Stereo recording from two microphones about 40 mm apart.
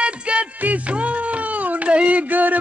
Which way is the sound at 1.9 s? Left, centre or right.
Right.